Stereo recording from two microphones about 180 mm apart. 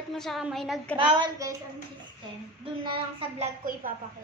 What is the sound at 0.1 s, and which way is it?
Speech, centre (ahead or behind).